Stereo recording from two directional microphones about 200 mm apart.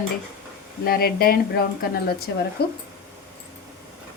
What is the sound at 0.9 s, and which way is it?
Speech, 50° left (ahead or behind).